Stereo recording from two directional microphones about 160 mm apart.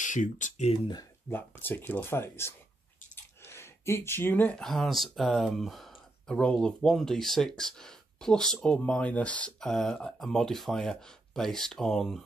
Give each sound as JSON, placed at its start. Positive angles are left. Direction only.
{"t": 0.0, "sound": "speech", "side_deg": 50}
{"t": 1.3, "sound": "speech", "side_deg": 10}